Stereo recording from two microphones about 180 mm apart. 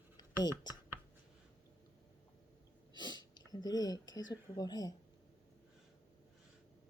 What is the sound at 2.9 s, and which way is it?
Speech, 25° left (ahead or behind).